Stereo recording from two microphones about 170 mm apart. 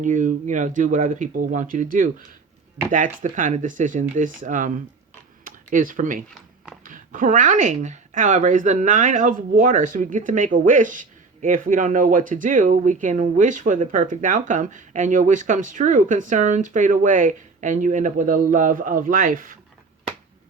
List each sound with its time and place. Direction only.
0.0 s speech: 50° right (ahead or behind)